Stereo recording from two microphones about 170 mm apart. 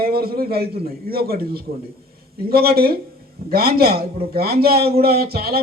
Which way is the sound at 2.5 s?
65° right (ahead or behind).